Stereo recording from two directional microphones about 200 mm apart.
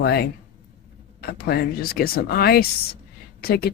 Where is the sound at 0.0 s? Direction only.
50° left (ahead or behind).